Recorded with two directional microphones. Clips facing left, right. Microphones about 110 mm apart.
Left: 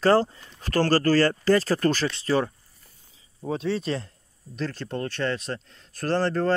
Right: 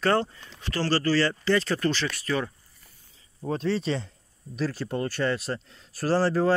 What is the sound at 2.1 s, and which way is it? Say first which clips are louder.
Speech: left 4 dB; 30° left (ahead or behind).